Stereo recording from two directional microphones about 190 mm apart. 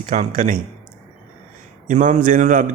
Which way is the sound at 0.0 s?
45° right (ahead or behind).